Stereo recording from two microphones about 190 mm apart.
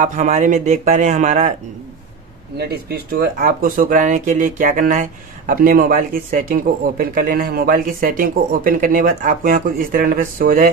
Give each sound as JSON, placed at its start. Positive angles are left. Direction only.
{"t": 0.0, "sound": "speech", "side_deg": -40}
{"t": 2.5, "sound": "speech", "side_deg": -55}